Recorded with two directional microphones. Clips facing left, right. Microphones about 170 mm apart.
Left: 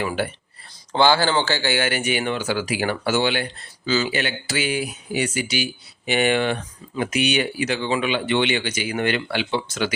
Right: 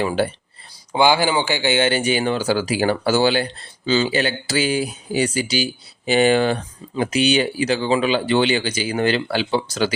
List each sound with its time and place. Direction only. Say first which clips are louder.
0.0 s speech: right 4 dB; 30° right (ahead or behind)
0.9 s speech: right 1 dB; 15° right (ahead or behind); by 9.9 s 35° right (ahead or behind)